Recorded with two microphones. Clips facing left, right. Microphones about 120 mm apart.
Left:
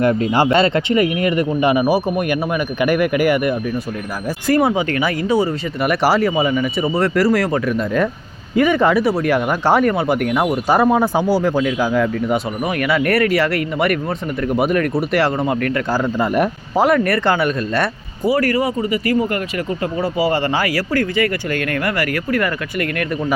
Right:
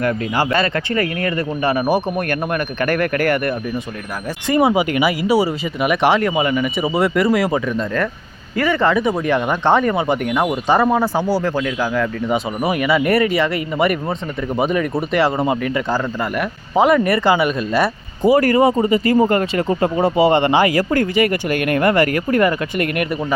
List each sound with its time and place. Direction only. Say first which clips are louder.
0.0 s speech: left 4 dB; 25° left (ahead or behind)
4.4 s speech: right 1 dB; centre (ahead or behind)
8.5 s speech: left 2 dB; 15° left (ahead or behind)
12.3 s speech: right 1 dB; 5° right (ahead or behind)
18.3 s speech: right 4 dB; 20° right (ahead or behind)